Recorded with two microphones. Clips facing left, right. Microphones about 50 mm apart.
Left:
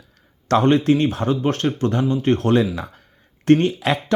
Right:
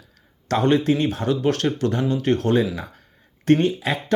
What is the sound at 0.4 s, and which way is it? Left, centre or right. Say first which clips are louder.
Speech: left 3 dB; left.